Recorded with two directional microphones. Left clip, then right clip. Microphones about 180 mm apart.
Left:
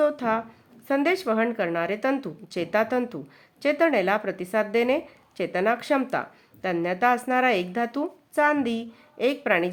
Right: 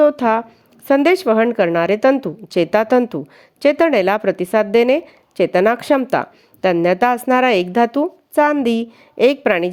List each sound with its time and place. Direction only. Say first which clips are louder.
0.0 s a woman's voice: right 10 dB; 45° right (ahead or behind)